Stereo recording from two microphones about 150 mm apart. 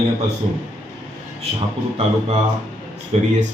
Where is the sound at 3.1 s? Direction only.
45° right (ahead or behind).